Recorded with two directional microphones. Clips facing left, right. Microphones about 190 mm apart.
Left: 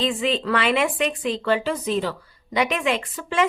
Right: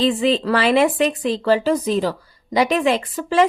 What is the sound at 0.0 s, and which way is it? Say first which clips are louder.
Speech: right 6 dB; 35° right (ahead or behind).